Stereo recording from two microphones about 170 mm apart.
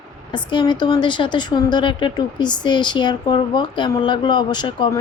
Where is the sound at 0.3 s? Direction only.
25° left (ahead or behind).